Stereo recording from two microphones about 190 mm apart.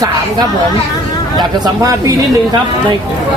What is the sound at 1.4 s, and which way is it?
Speech, 20° right (ahead or behind).